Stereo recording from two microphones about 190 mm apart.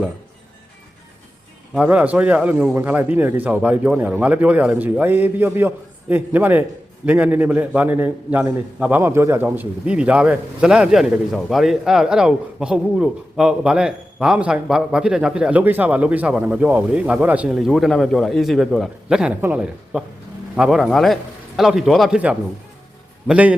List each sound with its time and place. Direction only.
1.7 s a man's voice: 5° right (ahead or behind)